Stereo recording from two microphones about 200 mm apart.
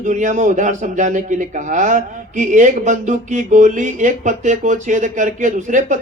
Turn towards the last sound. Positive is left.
turn(degrees=-40)  # may be behind; listen again after turning